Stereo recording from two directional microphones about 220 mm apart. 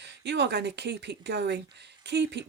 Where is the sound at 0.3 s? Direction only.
50° right (ahead or behind).